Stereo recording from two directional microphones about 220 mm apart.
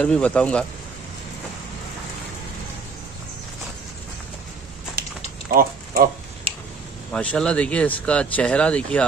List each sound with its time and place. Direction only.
0.0 s speech: 5° left (ahead or behind)
5.0 s mechanisms: 45° right (ahead or behind)
5.5 s a sound: 40° right (ahead or behind)
6.5 s tick-tock: 25° right (ahead or behind)
7.1 s speech: 5° left (ahead or behind)